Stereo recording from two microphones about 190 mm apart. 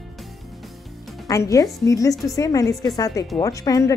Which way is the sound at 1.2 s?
15° left (ahead or behind).